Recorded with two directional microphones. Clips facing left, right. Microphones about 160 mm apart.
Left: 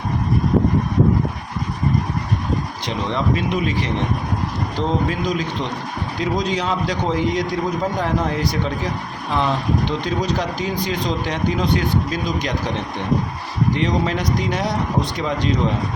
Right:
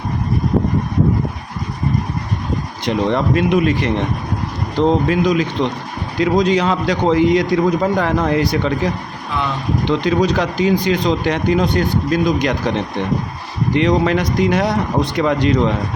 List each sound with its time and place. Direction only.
2.8 s speech: 55° right (ahead or behind)
5.0 s a man's voice: 70° right (ahead or behind)
9.9 s a man's voice: 80° right
11.8 s speech: 55° right (ahead or behind)
13.7 s a man's voice: 70° right (ahead or behind)